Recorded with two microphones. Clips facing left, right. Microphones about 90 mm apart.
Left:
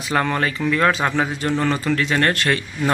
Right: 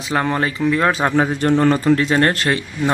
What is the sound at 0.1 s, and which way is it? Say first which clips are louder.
A man's voice: right 1 dB; 20° right (ahead or behind).